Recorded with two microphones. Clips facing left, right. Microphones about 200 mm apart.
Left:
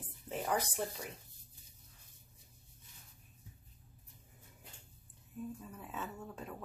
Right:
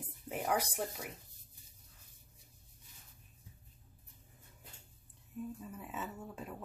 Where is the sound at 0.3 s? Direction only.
10° right (ahead or behind).